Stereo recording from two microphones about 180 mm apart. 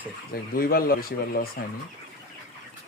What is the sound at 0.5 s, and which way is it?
Speech, 55° left (ahead or behind).